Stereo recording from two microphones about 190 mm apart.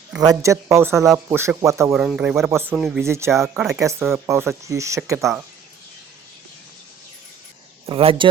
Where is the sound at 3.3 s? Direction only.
Centre (ahead or behind).